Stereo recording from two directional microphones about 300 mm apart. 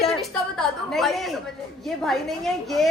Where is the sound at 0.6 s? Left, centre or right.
Centre.